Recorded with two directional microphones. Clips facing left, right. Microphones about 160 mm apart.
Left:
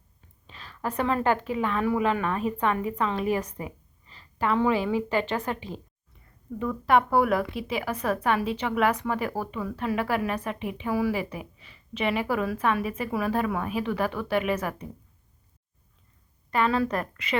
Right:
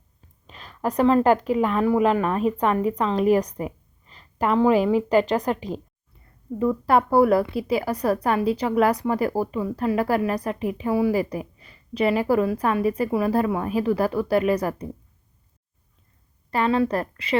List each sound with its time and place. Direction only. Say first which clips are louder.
0.4 s a woman's voice: right 6 dB; 40° right (ahead or behind)
11.2 s a woman's voice: right 7 dB; 40° right (ahead or behind)
16.5 s a woman's voice: right 3 dB; 30° right (ahead or behind)